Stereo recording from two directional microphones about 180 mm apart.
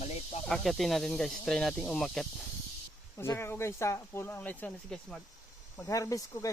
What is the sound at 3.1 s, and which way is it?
Speech, 15° left (ahead or behind).